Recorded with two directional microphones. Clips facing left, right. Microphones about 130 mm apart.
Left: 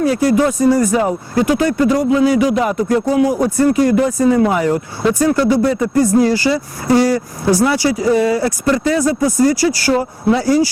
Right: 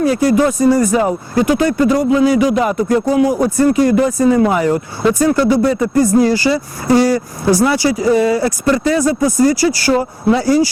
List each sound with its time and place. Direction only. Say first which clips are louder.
0.0 s speech: right 1 dB; 25° right (ahead or behind)